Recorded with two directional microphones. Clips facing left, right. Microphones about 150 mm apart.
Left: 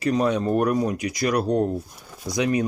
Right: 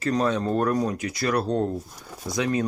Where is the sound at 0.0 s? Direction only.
15° left (ahead or behind).